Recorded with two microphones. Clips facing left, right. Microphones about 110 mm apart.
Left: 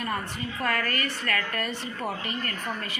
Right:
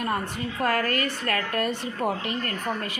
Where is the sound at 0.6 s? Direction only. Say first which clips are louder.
Right 4 dB; 45° right (ahead or behind).